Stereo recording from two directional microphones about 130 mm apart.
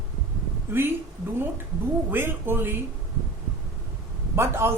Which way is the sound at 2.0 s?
15° right (ahead or behind).